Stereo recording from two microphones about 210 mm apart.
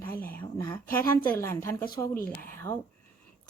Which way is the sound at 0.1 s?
45° left (ahead or behind).